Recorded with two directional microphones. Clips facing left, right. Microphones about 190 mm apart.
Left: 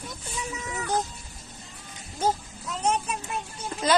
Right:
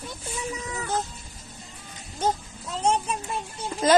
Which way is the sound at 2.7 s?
30° right (ahead or behind).